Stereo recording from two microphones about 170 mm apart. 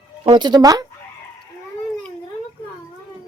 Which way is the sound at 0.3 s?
25° right (ahead or behind).